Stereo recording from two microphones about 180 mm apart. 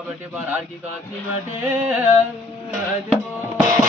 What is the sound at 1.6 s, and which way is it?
Music, 10° right (ahead or behind).